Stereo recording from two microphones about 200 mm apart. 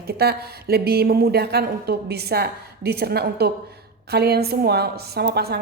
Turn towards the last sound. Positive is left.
turn(degrees=-55)  # may be behind; listen again after turning